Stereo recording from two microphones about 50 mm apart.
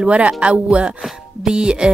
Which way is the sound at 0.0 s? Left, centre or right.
Centre.